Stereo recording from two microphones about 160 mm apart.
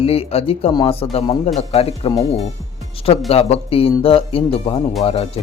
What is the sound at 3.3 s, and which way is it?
Speech, 40° left (ahead or behind).